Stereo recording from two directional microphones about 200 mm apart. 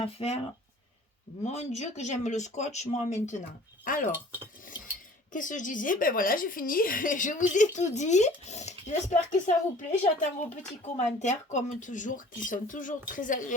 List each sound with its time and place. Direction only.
0.0 s a woman's voice: 30° left (ahead or behind)
1.5 s a woman's voice: 35° left (ahead or behind)
5.3 s a woman's voice: 40° left (ahead or behind)
10.2 s a woman's voice: 35° left (ahead or behind)